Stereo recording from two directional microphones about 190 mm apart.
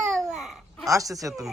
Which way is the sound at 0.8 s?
15° right (ahead or behind).